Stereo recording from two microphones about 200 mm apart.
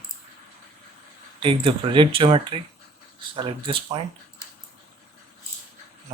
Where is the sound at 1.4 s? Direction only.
25° right (ahead or behind).